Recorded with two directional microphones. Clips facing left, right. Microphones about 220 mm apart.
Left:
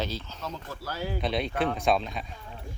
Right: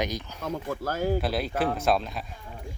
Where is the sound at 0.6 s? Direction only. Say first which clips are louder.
Right 9 dB; 50° right (ahead or behind).